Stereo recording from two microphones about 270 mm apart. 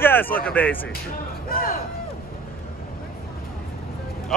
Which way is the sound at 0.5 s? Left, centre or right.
Centre.